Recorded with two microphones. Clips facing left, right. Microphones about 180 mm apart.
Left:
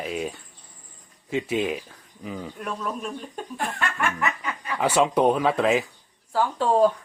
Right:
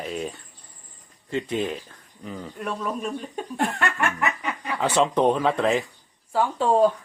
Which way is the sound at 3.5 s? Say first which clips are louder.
Right 4 dB; 70° right (ahead or behind).